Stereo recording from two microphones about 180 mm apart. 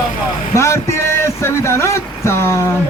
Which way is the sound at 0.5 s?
15° left (ahead or behind).